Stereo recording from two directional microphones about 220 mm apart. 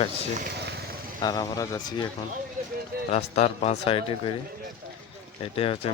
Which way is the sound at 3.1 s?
30° left (ahead or behind).